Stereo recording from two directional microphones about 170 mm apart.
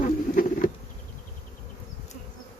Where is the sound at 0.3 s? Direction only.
50° left (ahead or behind).